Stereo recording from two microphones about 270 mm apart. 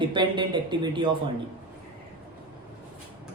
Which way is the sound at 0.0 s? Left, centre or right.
Centre.